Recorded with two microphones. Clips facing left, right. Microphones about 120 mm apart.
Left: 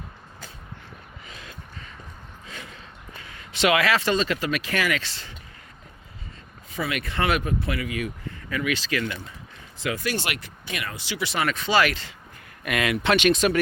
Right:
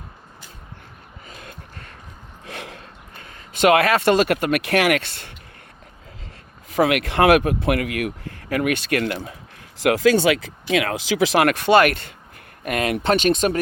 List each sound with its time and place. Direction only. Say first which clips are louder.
1.3 s a sound: right 3 dB; 50° right (ahead or behind)
2.5 s a sound: right 7 dB; 70° right (ahead or behind)
3.2 s speech: right 4 dB; 50° right (ahead or behind)
6.7 s speech: right 11 dB; 90° right; by 9.3 s 65° right (ahead or behind)
9.7 s speech: right 11 dB; 85° right; by 12.1 s 55° right (ahead or behind)
12.6 s speech: right 3 dB; 45° right (ahead or behind)